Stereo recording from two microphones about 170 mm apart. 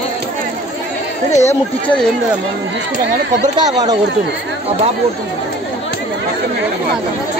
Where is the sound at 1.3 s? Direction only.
40° left (ahead or behind).